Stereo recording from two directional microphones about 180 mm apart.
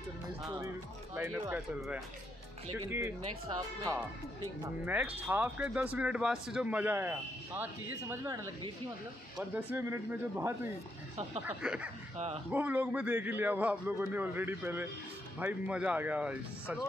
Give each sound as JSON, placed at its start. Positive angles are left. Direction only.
{"t": 2.9, "sound": "speech", "side_deg": -15}
{"t": 9.7, "sound": "speech", "side_deg": -10}